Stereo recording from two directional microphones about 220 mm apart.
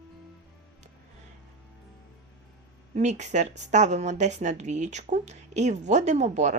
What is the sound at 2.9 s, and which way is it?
A woman's voice, 30° right (ahead or behind).